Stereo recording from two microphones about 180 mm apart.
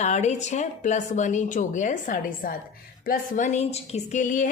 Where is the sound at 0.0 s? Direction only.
40° left (ahead or behind).